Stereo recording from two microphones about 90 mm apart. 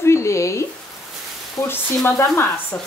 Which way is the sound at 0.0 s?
30° left (ahead or behind).